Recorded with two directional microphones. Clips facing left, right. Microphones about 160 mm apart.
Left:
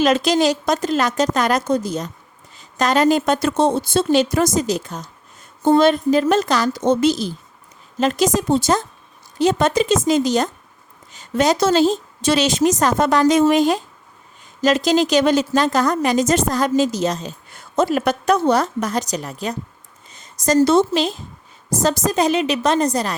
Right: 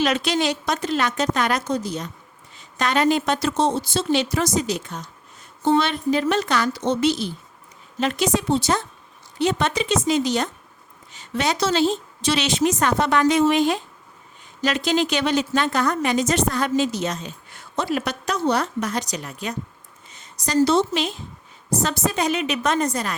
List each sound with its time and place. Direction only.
0.0 s a woman's voice: 40° left (ahead or behind)
14.8 s a woman's voice: 40° left (ahead or behind)